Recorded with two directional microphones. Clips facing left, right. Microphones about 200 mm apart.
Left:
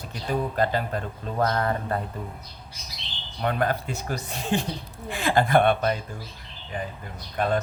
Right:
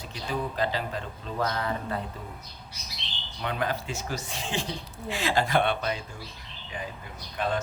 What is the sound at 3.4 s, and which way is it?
Speech, 50° left (ahead or behind).